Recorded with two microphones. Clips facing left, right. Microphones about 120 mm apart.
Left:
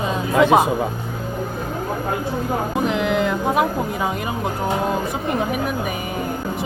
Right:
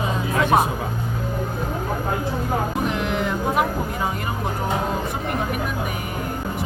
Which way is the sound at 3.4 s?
20° left (ahead or behind).